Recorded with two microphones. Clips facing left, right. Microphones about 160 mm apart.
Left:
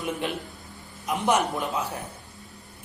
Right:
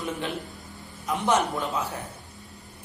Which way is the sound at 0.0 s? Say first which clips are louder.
Left 2 dB; 15° left (ahead or behind).